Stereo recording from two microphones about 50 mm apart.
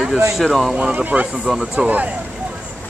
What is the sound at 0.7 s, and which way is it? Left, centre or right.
Speech, right.